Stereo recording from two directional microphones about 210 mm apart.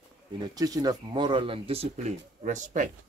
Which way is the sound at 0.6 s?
15° right (ahead or behind).